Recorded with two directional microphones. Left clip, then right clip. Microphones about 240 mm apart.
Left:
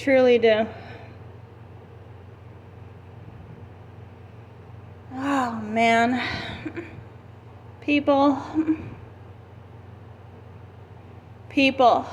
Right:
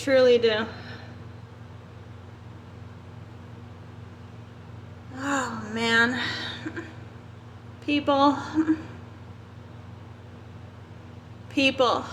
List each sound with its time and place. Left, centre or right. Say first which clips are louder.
0.0 s speech: left 2 dB; centre
5.1 s speech: left 3 dB; centre
7.9 s speech: left 2 dB; centre
11.5 s speech: left 4 dB; centre